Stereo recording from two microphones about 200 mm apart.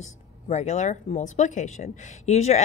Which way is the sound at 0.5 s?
35° left (ahead or behind).